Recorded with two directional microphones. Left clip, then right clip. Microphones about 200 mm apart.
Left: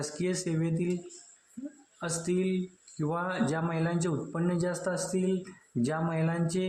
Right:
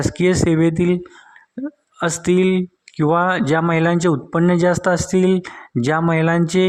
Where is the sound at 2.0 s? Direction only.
40° right (ahead or behind).